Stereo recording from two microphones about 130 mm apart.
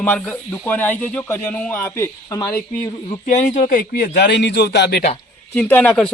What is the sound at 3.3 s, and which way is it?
Speech, 65° left (ahead or behind).